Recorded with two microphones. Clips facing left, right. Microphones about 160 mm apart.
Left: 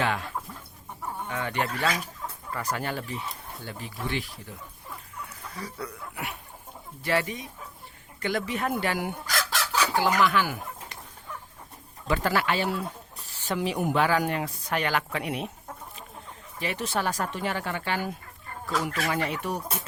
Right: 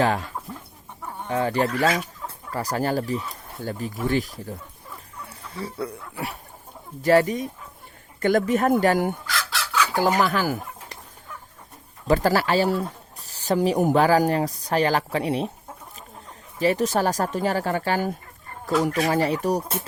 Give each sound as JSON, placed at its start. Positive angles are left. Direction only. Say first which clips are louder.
{"t": 0.0, "sound": "speech", "louder": "right 6 dB", "side_deg": -40}
{"t": 1.3, "sound": "speech", "louder": "right 8 dB", "side_deg": -35}
{"t": 5.2, "sound": "speech", "louder": "right 6 dB", "side_deg": -30}
{"t": 9.2, "sound": "chicken", "louder": "right 1 dB", "side_deg": 45}
{"t": 10.2, "sound": "speech", "louder": "right 2 dB", "side_deg": -40}
{"t": 12.0, "sound": "speech", "louder": "right 6 dB", "side_deg": -40}
{"t": 16.6, "sound": "speech", "louder": "right 9 dB", "side_deg": -40}